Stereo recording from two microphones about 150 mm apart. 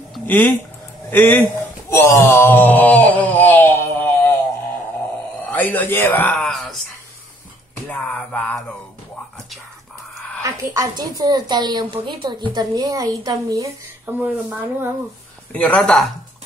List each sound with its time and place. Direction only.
1.1 s speech: 15° left (ahead or behind)
1.9 s wail: 20° left (ahead or behind)
5.5 s speech: 10° left (ahead or behind)
7.9 s speech: 10° left (ahead or behind)
10.4 s a woman's voice: 25° right (ahead or behind)
15.5 s speech: 5° left (ahead or behind)